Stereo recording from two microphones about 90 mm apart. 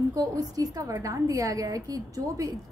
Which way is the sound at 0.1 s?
45° right (ahead or behind).